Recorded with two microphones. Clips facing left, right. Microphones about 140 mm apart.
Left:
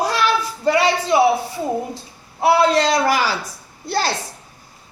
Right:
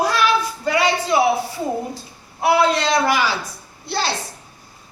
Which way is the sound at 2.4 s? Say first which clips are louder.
Left 2 dB; 30° left (ahead or behind).